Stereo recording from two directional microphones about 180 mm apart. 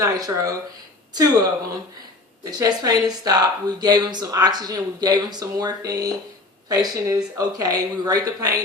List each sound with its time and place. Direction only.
0.0 s speech: 20° right (ahead or behind)
2.4 s speech: 20° right (ahead or behind)